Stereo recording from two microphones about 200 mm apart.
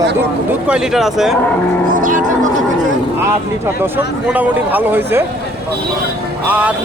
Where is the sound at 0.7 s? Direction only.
5° right (ahead or behind).